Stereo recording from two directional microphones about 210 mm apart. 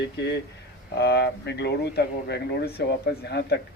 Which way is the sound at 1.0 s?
50° left (ahead or behind).